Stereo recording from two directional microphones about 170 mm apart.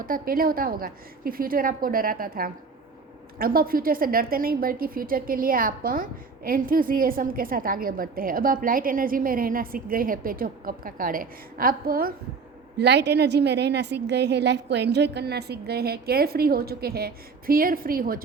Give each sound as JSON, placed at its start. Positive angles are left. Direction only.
{"t": 0.0, "sound": "a woman's voice", "side_deg": -55}
{"t": 12.8, "sound": "a woman's voice", "side_deg": -90}